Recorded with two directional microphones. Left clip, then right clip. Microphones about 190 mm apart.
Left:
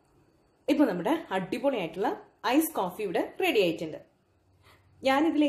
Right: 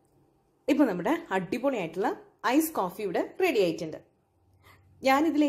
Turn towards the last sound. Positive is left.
turn(degrees=-35)  # may be behind; listen again after turning